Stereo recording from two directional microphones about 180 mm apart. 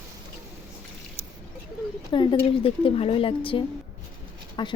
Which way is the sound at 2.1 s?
25° left (ahead or behind).